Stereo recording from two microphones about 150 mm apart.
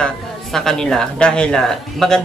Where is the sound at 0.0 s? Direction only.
Centre (ahead or behind).